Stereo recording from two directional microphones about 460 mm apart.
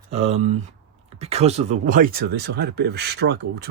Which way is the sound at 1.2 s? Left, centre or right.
Centre.